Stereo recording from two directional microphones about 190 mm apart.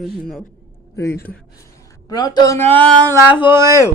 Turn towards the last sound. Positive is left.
turn(degrees=-15)  # may be behind; listen again after turning